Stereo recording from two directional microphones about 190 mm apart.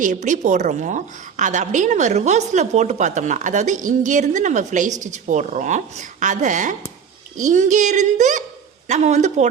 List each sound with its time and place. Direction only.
0.0 s a woman's voice: 40° right (ahead or behind)